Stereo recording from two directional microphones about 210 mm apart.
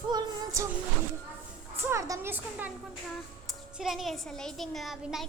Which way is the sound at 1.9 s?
10° right (ahead or behind).